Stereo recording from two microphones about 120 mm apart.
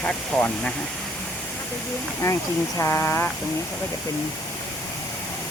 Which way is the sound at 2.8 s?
20° left (ahead or behind).